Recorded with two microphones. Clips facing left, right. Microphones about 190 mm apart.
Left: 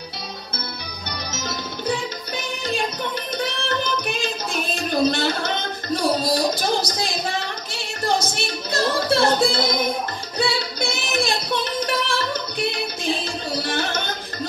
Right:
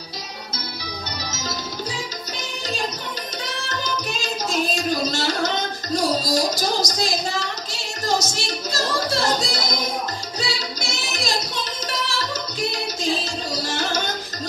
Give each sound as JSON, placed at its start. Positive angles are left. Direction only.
{"t": 1.9, "sound": "music", "side_deg": 60}
{"t": 5.9, "sound": "a sound", "side_deg": 55}
{"t": 10.4, "sound": "singing", "side_deg": 55}